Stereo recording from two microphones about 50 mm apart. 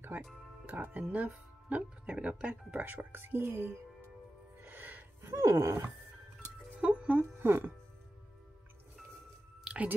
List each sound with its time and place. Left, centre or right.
0.9 s speech: right
2.9 s a woman's voice: right
4.6 s music: right
5.3 s a sound: right
6.8 s speech: right
7.2 s a woman's voice: right
9.7 s music: centre